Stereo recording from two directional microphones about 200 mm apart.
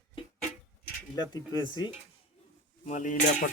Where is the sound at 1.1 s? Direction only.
20° left (ahead or behind).